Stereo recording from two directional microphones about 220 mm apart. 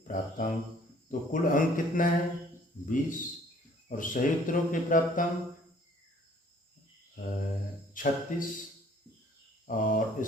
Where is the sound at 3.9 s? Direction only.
35° left (ahead or behind).